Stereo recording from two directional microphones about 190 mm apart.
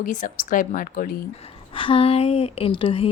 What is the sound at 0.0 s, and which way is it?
A woman's voice, 45° left (ahead or behind).